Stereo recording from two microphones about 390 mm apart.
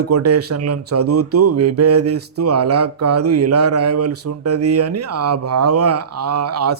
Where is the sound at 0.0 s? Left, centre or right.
Right.